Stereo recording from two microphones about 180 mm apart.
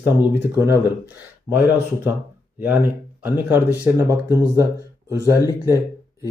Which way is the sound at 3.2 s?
10° right (ahead or behind).